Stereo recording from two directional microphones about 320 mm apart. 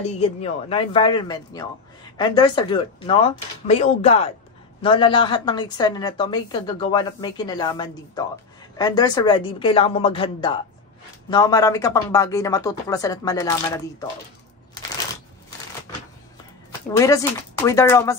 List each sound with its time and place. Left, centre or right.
0.0 s a woman's voice: centre
16.9 s a woman's voice: centre